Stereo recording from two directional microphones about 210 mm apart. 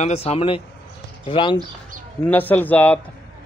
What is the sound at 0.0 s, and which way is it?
Speech, 30° left (ahead or behind).